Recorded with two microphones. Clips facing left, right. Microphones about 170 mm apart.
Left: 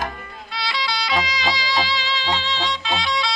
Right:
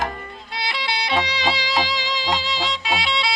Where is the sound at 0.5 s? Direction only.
20° right (ahead or behind).